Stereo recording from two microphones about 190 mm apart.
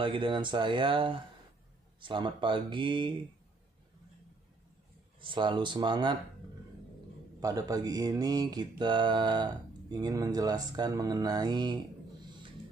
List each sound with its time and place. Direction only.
0.0 s speech: 25° right (ahead or behind)
5.2 s speech: 25° right (ahead or behind)
7.3 s speech: 20° right (ahead or behind)